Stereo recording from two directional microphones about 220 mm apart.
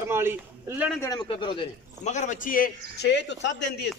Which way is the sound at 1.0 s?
20° left (ahead or behind).